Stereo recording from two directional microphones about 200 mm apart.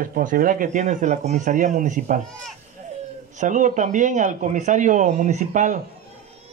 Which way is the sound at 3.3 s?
40° right (ahead or behind).